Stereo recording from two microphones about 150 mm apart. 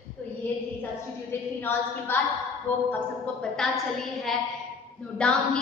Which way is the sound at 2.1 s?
15° left (ahead or behind).